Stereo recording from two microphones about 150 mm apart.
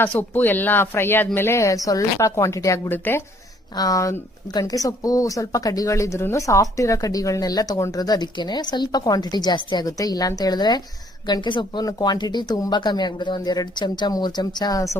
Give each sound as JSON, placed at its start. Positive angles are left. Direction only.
{"t": 0.0, "sound": "speech", "side_deg": 10}